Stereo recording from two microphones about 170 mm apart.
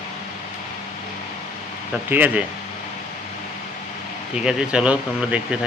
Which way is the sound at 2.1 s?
10° right (ahead or behind).